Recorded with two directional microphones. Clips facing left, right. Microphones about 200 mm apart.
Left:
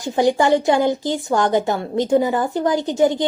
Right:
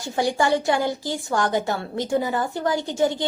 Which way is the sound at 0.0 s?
20° left (ahead or behind).